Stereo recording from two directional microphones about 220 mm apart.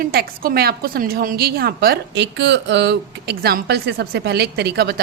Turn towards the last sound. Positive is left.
turn(degrees=-45)  # may be behind; listen again after turning